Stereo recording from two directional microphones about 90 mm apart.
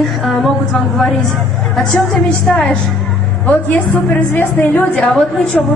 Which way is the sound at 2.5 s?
15° left (ahead or behind).